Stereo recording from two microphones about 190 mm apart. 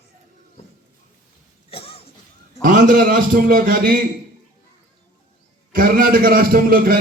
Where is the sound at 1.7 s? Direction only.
30° left (ahead or behind).